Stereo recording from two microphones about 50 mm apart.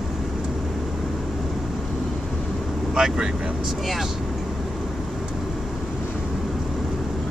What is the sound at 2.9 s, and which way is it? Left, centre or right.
Speech, centre.